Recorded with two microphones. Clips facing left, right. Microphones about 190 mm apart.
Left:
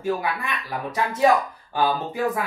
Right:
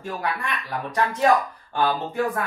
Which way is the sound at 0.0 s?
5° left (ahead or behind).